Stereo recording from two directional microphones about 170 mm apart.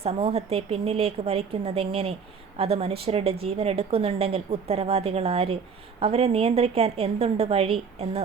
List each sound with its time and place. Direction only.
0.0 s a woman's voice: 35° right (ahead or behind)